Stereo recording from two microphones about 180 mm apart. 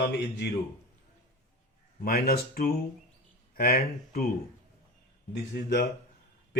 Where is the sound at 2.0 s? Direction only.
60° left (ahead or behind).